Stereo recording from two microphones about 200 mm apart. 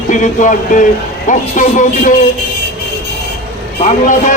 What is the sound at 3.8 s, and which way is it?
Speech, 40° left (ahead or behind).